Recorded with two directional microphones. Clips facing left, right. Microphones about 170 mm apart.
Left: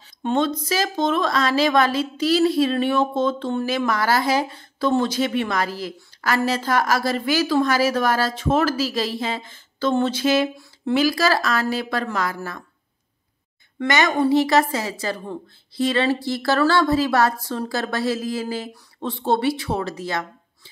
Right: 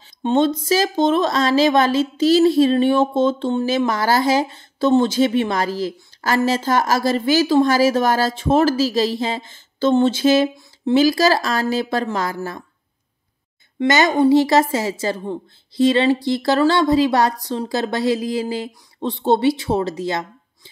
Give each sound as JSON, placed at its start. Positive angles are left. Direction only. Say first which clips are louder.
{"t": 0.2, "sound": "speech", "louder": "right 4 dB", "side_deg": -25}
{"t": 13.7, "sound": "speech", "louder": "right 4 dB", "side_deg": -25}